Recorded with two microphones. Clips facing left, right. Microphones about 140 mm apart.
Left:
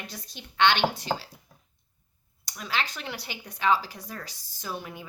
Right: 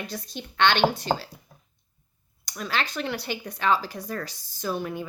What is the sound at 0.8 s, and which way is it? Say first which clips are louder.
Speech: right 4 dB; 50° right (ahead or behind).